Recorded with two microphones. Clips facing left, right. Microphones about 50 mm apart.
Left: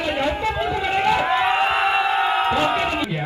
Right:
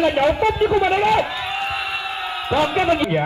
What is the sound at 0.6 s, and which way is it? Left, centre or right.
Speech, right.